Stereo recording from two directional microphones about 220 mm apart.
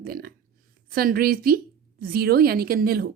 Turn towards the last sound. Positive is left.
turn(degrees=-45)  # may be behind; listen again after turning